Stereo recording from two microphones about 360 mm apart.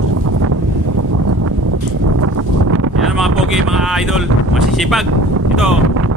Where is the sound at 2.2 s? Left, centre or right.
Right.